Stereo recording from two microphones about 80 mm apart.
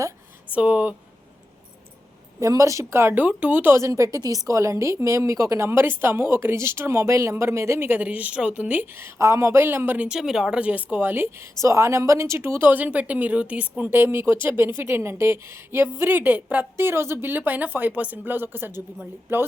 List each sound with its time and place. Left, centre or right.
0.5 s a woman's voice: centre
2.4 s a woman's voice: right
3.2 s a woman's voice: centre
3.8 s a woman's voice: right
10.1 s speech: centre
10.8 s a woman's voice: right
16.7 s a woman's voice: right